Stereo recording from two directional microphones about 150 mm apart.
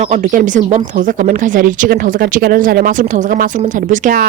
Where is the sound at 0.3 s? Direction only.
60° right (ahead or behind).